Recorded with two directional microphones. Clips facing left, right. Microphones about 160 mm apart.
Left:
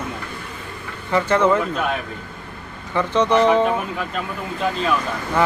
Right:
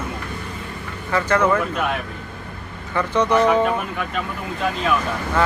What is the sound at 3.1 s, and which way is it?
Speech, 10° right (ahead or behind).